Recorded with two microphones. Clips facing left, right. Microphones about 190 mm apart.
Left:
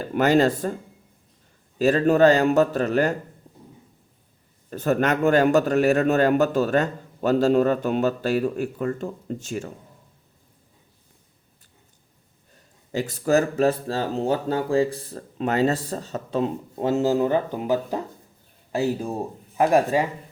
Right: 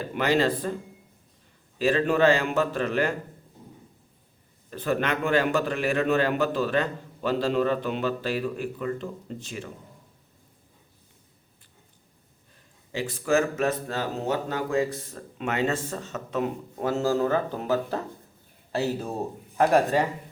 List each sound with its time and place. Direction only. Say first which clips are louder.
0.1 s a man's voice: left 5 dB; 45° left (ahead or behind)
1.8 s speech: left 5 dB; 40° left (ahead or behind)
4.7 s a man's voice: left 5 dB; 45° left (ahead or behind)
12.9 s speech: left 4 dB; 40° left (ahead or behind); by 20.1 s 15° left (ahead or behind)